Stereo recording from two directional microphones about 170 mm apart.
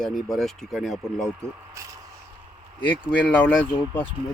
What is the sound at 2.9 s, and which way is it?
Speech, 10° left (ahead or behind).